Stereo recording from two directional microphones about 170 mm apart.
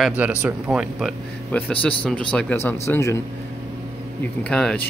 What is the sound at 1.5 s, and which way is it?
Speech, 10° left (ahead or behind).